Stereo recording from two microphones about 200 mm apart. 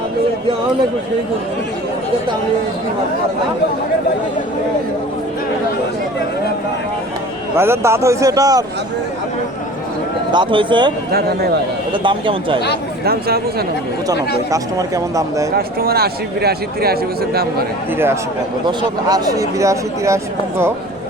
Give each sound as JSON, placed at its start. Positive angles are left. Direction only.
{"t": 7.6, "sound": "speech", "side_deg": -15}
{"t": 10.3, "sound": "speech", "side_deg": -25}
{"t": 11.1, "sound": "a man's voice", "side_deg": -50}
{"t": 12.0, "sound": "speech", "side_deg": -25}
{"t": 13.1, "sound": "a man's voice", "side_deg": -50}
{"t": 14.1, "sound": "speech", "side_deg": -15}
{"t": 15.5, "sound": "a man's voice", "side_deg": -50}
{"t": 17.9, "sound": "speech", "side_deg": -10}